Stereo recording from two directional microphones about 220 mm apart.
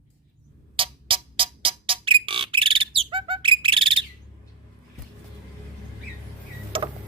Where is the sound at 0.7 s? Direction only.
25° right (ahead or behind).